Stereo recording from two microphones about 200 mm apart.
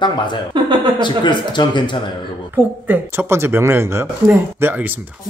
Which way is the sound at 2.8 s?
10° right (ahead or behind).